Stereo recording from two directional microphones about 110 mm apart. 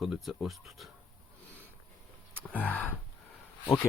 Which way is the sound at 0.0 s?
Centre (ahead or behind).